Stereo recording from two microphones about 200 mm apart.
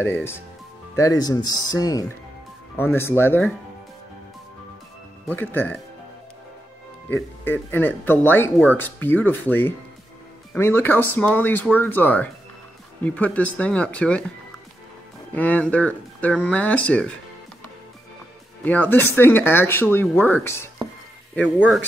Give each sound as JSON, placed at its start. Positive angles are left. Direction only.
{"t": 0.0, "sound": "speech", "side_deg": 10}
{"t": 5.3, "sound": "speech", "side_deg": 10}
{"t": 7.1, "sound": "speech", "side_deg": 10}
{"t": 15.3, "sound": "speech", "side_deg": 5}
{"t": 18.6, "sound": "speech", "side_deg": 10}
{"t": 21.4, "sound": "speech", "side_deg": 5}